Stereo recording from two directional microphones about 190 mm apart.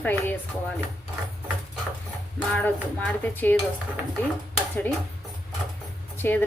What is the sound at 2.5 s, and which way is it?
Speech, 10° left (ahead or behind).